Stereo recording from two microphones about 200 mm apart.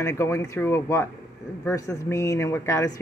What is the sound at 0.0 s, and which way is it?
A woman's voice, 15° left (ahead or behind).